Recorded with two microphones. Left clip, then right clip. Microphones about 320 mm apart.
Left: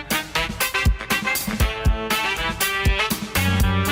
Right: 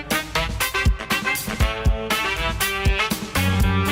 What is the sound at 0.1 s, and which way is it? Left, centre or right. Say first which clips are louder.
Music: even; centre.